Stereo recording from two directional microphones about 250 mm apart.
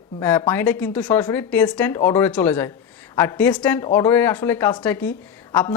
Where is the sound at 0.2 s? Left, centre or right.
Centre.